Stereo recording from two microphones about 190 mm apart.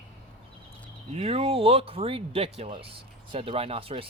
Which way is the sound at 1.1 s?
35° right (ahead or behind).